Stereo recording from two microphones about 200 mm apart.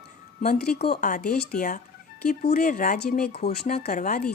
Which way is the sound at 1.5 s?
40° left (ahead or behind).